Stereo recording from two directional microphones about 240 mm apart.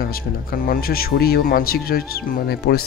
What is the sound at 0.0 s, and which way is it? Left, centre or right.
Speech, left.